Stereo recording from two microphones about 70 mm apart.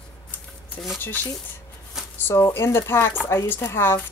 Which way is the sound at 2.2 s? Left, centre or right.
Left.